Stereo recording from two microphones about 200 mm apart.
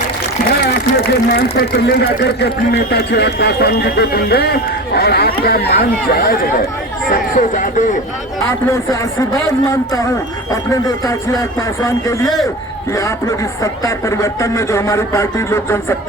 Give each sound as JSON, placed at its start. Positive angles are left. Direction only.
{"t": 0.6, "sound": "speech", "side_deg": 50}
{"t": 8.4, "sound": "speech", "side_deg": 15}